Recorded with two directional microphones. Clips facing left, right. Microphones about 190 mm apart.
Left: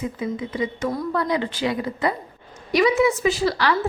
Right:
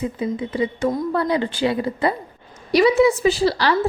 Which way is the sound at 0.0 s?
30° right (ahead or behind).